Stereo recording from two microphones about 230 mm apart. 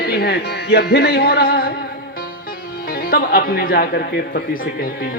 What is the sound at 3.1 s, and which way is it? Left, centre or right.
Speech, left.